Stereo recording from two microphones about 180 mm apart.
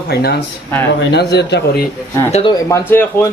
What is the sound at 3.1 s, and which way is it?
Speech, 10° left (ahead or behind).